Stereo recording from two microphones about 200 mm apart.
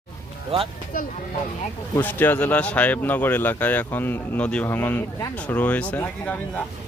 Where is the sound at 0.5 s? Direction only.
30° right (ahead or behind).